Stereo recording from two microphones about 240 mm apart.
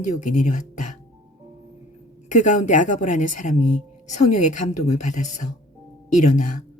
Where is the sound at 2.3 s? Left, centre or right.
Left.